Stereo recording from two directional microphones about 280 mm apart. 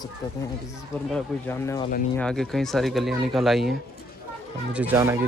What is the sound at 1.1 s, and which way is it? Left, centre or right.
Speech, centre.